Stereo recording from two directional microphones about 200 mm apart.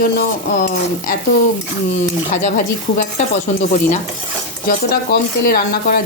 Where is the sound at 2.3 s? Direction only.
35° left (ahead or behind).